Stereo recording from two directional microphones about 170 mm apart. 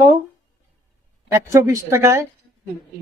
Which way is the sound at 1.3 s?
15° right (ahead or behind).